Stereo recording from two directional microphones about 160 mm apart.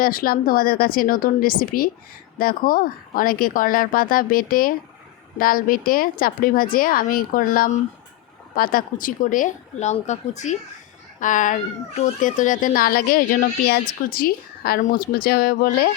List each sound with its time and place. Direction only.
0.0 s a woman's voice: 65° left (ahead or behind)